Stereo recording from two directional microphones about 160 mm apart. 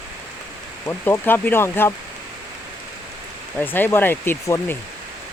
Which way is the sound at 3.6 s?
10° left (ahead or behind).